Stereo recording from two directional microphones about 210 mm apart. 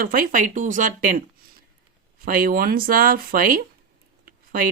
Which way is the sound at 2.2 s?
40° right (ahead or behind).